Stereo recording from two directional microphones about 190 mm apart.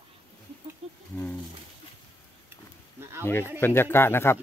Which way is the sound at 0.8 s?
30° right (ahead or behind).